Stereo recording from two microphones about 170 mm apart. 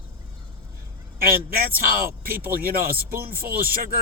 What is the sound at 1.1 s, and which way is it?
A man's voice, 60° right (ahead or behind).